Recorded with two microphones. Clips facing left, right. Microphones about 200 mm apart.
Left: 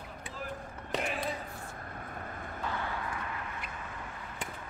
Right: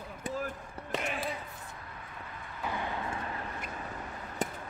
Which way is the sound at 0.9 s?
Centre (ahead or behind).